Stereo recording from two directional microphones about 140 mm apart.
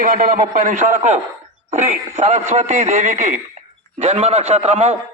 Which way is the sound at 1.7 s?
55° right (ahead or behind).